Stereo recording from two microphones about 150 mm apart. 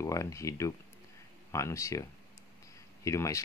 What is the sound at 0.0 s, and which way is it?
Speech, 20° left (ahead or behind).